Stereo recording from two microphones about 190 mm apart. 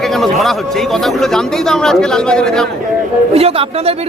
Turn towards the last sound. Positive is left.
turn(degrees=-30)  # may be behind; listen again after turning